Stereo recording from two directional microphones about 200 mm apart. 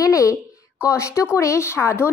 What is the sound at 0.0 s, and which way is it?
Speech, 15° left (ahead or behind).